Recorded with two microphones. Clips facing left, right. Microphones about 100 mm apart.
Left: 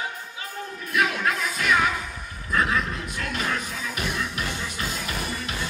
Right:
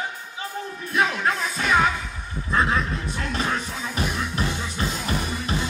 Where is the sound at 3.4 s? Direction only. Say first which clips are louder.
Right 2 dB; 30° right (ahead or behind).